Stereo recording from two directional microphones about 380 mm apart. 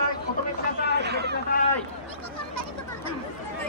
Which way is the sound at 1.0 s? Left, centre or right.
Right.